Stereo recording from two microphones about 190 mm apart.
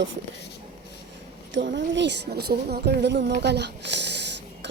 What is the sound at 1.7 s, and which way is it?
A woman's voice, 65° right (ahead or behind).